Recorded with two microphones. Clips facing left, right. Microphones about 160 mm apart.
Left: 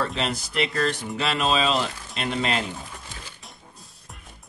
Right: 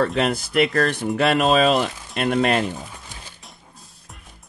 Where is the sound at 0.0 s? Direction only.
55° right (ahead or behind).